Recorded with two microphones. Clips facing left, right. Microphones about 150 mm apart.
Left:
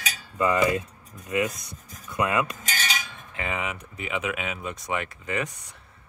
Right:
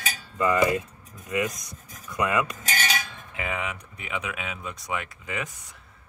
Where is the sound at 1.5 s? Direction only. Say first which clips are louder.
Left 1 dB; 30° left (ahead or behind).